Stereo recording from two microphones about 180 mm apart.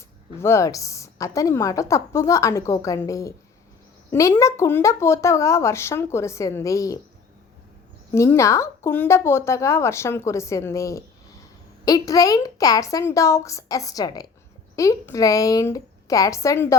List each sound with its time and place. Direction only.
0.3 s a woman's voice: 15° left (ahead or behind)
8.1 s a woman's voice: 15° left (ahead or behind)